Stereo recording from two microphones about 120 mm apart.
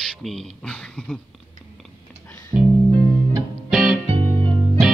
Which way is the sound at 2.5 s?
30° right (ahead or behind).